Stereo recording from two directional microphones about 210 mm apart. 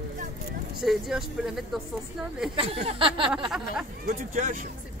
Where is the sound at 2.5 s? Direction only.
25° right (ahead or behind).